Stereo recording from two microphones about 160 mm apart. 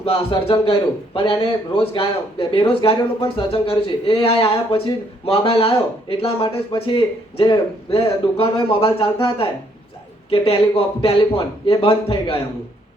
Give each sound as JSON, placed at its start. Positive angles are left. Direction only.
{"t": 0.0, "sound": "a man's voice", "side_deg": 35}